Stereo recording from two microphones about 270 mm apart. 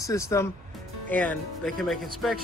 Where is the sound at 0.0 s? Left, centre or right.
Centre.